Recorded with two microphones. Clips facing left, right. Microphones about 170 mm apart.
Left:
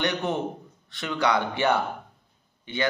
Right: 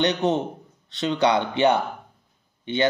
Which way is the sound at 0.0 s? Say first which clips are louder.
Right 5 dB; 20° right (ahead or behind).